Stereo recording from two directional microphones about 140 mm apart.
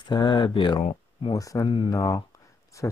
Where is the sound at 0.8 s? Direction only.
45° left (ahead or behind).